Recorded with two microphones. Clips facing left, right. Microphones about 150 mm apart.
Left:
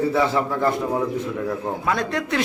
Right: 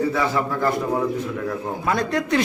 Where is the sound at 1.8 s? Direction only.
Centre (ahead or behind).